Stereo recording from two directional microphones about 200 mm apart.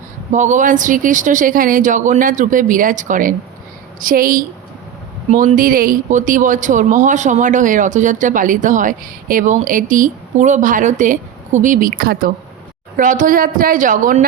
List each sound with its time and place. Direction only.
0.3 s a woman's voice: 40° right (ahead or behind)